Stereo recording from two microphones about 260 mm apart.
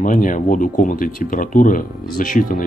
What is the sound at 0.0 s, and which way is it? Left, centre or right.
Speech, left.